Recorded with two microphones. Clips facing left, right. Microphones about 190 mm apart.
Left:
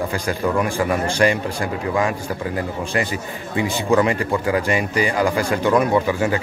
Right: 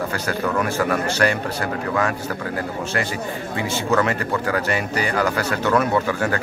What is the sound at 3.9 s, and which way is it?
A man's voice, 15° left (ahead or behind).